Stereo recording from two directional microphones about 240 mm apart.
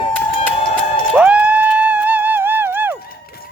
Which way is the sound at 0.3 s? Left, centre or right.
Left.